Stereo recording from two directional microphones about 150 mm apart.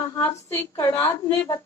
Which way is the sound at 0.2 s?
15° left (ahead or behind).